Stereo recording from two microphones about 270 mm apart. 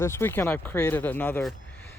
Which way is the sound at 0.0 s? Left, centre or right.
Centre.